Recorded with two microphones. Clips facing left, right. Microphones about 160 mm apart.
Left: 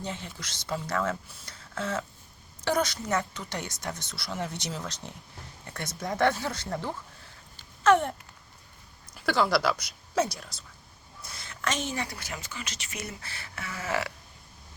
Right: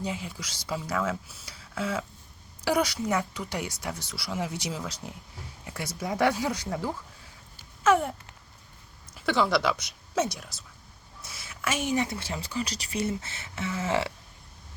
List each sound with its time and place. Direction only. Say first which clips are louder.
0.0 s speech: right 3 dB; 10° right (ahead or behind)
7.9 s a sound: left 1 dB; 5° right (ahead or behind)
9.1 s a woman's voice: even; centre (ahead or behind); by 14.1 s 25° right (ahead or behind)